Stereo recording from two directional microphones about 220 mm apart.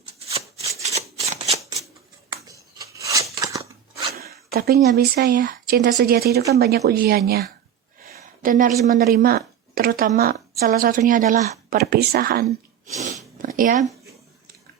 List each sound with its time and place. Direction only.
0.3 s rub: 25° right (ahead or behind)
0.9 s shuffling cards: 30° right (ahead or behind)
2.7 s scissors: 15° right (ahead or behind)
4.5 s a woman's voice: 45° right (ahead or behind)
11.8 s speech: 45° right (ahead or behind)
12.9 s sneeze: 35° right (ahead or behind)
13.4 s a sound: 40° right (ahead or behind)